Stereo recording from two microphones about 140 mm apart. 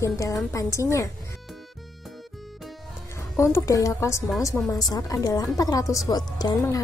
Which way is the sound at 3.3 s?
20° left (ahead or behind).